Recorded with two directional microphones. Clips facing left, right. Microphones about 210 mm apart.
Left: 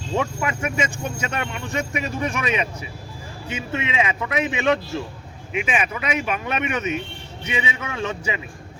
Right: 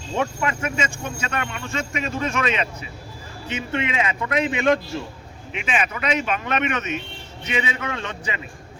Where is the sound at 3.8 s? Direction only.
15° left (ahead or behind).